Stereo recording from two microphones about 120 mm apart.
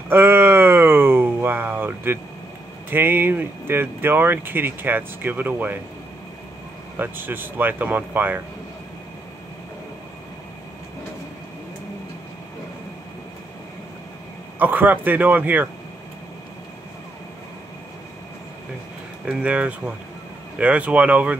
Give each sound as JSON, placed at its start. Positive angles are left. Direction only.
{"t": 0.1, "sound": "a sound", "side_deg": -20}
{"t": 2.9, "sound": "speech", "side_deg": -15}
{"t": 7.0, "sound": "speech", "side_deg": -15}
{"t": 14.6, "sound": "speech", "side_deg": -15}
{"t": 19.2, "sound": "speech", "side_deg": -10}